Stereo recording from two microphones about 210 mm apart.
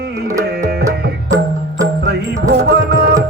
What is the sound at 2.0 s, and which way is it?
Music, 55° right (ahead or behind).